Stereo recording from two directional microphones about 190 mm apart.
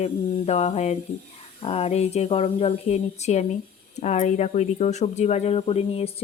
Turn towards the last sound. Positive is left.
turn(degrees=30)  # may be behind; listen again after turning